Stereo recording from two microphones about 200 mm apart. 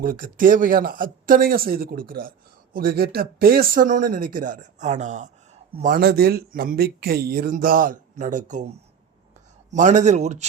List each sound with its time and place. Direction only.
0.0 s speech: 45° right (ahead or behind)